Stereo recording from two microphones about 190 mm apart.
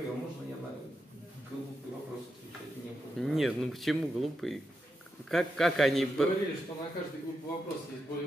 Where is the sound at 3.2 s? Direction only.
Centre (ahead or behind).